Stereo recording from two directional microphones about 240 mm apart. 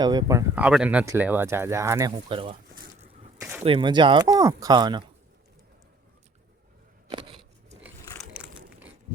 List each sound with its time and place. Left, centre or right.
0.0 s speech: centre
3.6 s speech: right
7.1 s a sound: right